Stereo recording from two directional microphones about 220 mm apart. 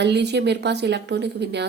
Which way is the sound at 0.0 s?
50° right (ahead or behind).